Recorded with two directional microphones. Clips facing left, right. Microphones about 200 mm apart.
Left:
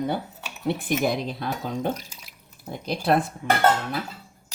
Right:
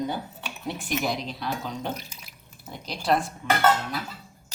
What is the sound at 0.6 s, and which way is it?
Speech, 55° left (ahead or behind).